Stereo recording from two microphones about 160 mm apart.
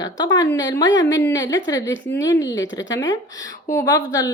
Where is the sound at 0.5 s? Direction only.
20° left (ahead or behind).